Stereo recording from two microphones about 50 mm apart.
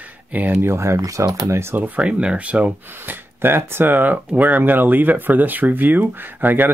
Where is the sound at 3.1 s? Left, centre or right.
Right.